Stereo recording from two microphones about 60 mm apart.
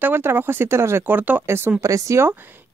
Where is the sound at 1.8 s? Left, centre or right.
Right.